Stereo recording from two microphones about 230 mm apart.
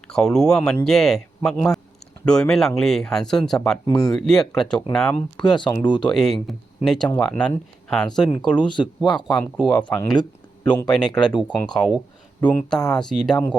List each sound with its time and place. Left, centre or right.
0.1 s speech: centre
5.4 s speech: centre
6.1 s speech: centre
10.9 s speech: centre